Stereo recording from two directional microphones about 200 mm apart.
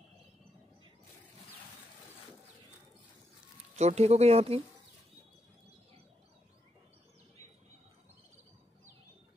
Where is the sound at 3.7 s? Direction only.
35° right (ahead or behind).